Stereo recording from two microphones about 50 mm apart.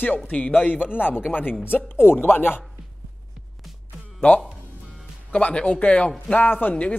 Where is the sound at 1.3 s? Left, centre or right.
Left.